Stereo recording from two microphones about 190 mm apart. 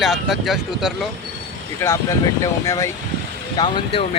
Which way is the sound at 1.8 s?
15° left (ahead or behind).